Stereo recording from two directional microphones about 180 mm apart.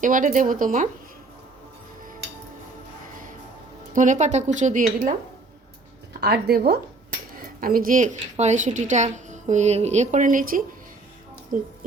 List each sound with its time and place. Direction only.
0.0 s a woman's voice: 45° right (ahead or behind)
3.9 s a woman's voice: 45° right (ahead or behind)
6.1 s a woman's voice: 60° right (ahead or behind); by 11.7 s 45° right (ahead or behind)